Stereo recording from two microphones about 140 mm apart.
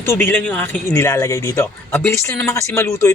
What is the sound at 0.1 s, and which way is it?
Speech, 15° left (ahead or behind).